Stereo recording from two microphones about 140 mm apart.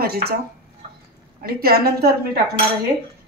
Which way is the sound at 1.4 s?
90° right.